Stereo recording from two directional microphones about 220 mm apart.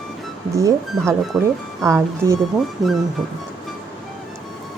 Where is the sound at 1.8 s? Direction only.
15° right (ahead or behind).